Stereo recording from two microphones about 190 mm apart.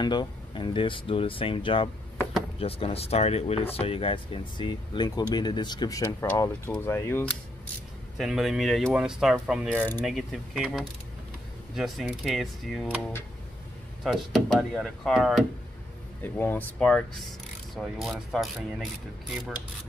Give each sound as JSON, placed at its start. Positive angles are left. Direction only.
{"t": 0.0, "sound": "speech", "side_deg": 25}
{"t": 8.2, "sound": "speech", "side_deg": 0}
{"t": 9.8, "sound": "speech", "side_deg": 10}
{"t": 16.2, "sound": "speech", "side_deg": 10}